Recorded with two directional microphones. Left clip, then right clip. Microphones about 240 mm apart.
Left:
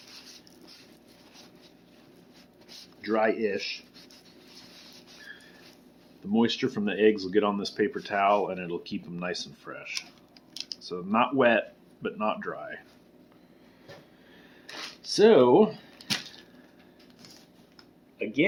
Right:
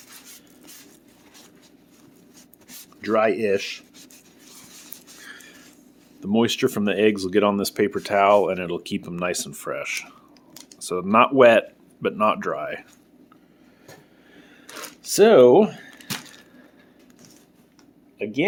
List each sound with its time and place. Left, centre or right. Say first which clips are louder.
3.0 s speech: right 6 dB; right
6.3 s speech: right 6 dB; right
15.0 s speech: right 6 dB; right
18.2 s speech: right 2 dB; right